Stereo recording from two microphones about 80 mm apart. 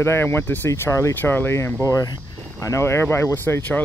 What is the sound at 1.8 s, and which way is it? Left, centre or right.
Speech, left.